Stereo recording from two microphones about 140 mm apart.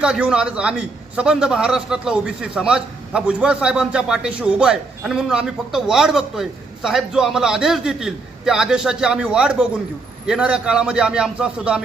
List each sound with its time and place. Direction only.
0.0 s a man's voice: 5° right (ahead or behind)